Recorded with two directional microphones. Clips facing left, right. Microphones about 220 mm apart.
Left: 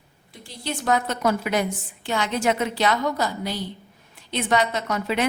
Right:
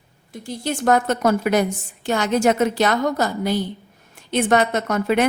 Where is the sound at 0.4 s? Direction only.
45° right (ahead or behind).